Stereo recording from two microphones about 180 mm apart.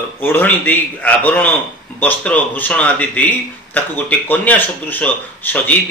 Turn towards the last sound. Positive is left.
turn(degrees=10)  # may be behind; listen again after turning